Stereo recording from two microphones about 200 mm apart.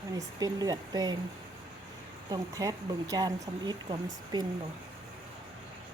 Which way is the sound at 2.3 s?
20° right (ahead or behind).